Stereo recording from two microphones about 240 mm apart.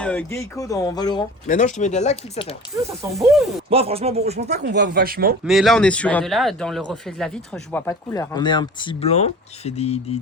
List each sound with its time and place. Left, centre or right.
0.0 s speech: centre
1.5 s speech: left
3.1 s speech: centre
3.7 s speech: right
4.5 s speech: right
5.5 s speech: centre; by 10.2 s left